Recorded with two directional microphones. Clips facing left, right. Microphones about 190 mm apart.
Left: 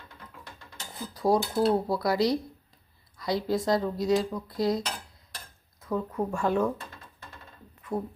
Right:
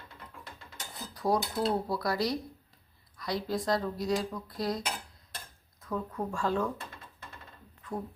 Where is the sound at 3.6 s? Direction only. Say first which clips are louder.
Left 4 dB; 25° left (ahead or behind).